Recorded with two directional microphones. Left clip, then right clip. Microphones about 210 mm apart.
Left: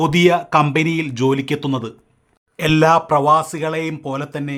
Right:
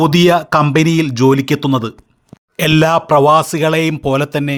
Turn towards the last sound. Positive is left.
turn(degrees=-30)  # may be behind; listen again after turning